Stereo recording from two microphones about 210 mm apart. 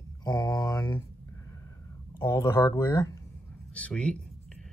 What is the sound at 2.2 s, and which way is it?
Speech, 20° left (ahead or behind).